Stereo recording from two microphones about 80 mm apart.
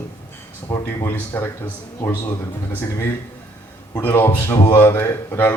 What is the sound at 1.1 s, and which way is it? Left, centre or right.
A man's voice, left.